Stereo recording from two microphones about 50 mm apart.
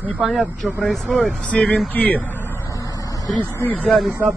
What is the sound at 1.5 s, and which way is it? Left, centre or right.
Speech, centre.